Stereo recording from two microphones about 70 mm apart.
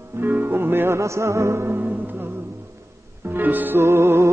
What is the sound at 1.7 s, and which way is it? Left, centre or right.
Music, right.